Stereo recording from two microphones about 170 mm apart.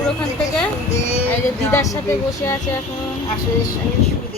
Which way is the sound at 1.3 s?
15° left (ahead or behind).